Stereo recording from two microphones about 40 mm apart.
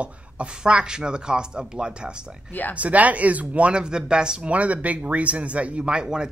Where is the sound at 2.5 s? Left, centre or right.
Left.